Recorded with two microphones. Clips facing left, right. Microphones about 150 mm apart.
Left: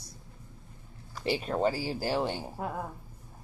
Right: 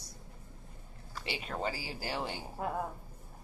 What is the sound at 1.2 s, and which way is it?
Speech, 40° left (ahead or behind).